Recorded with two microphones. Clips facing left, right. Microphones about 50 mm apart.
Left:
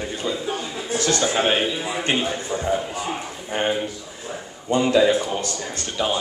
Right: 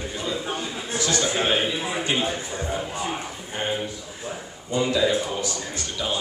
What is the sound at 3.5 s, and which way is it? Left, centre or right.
Speech, left.